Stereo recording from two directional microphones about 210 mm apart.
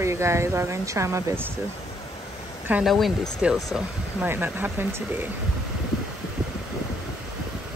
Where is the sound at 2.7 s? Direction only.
Centre (ahead or behind).